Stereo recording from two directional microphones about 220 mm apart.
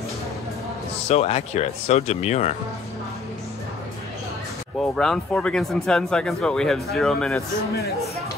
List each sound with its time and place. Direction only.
1.0 s speech: 30° left (ahead or behind)
4.7 s speech: centre (ahead or behind)